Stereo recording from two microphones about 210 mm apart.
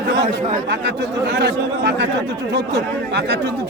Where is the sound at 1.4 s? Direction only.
55° right (ahead or behind).